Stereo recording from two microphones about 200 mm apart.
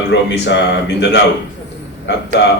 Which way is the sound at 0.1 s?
65° left (ahead or behind).